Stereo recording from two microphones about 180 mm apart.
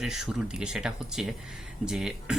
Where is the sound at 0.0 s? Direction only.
5° right (ahead or behind).